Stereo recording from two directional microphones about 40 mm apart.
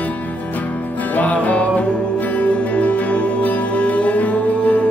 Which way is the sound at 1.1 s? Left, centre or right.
Left.